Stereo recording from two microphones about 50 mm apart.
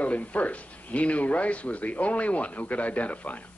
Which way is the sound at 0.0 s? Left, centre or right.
Left.